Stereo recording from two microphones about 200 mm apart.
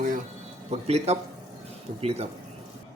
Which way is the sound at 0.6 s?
30° right (ahead or behind).